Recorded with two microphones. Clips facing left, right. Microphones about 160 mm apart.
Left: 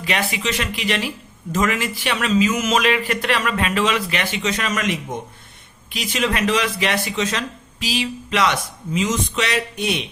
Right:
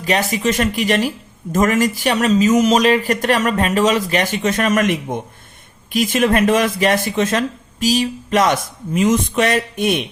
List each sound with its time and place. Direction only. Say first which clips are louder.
0.0 s speech: right 6 dB; 40° right (ahead or behind)